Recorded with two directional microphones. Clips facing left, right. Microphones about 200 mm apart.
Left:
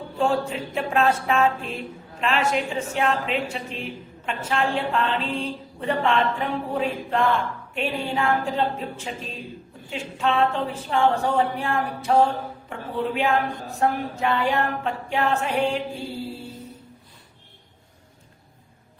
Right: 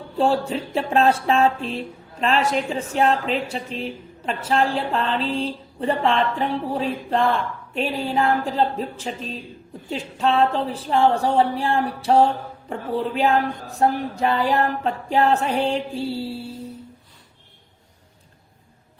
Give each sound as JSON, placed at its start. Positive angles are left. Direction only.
{"t": 0.2, "sound": "a woman's voice", "side_deg": -35}